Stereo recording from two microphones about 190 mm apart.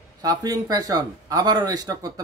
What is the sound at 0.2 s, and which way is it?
Speech, 20° right (ahead or behind).